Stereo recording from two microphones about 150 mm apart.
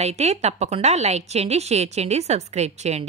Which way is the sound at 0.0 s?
45° right (ahead or behind).